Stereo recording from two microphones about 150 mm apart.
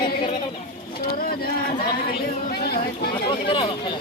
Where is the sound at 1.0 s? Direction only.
80° left.